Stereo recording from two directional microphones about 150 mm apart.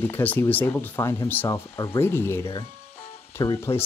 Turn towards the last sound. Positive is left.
turn(degrees=30)  # may be behind; listen again after turning